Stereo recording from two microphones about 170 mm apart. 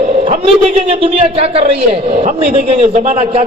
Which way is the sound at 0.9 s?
35° right (ahead or behind).